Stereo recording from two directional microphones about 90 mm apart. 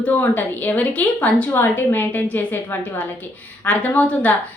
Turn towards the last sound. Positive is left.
turn(degrees=20)  # may be behind; listen again after turning